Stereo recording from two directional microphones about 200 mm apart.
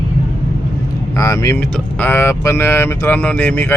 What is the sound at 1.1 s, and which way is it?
Speech, 15° left (ahead or behind).